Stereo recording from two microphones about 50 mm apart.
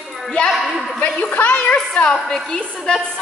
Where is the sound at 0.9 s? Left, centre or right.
Left.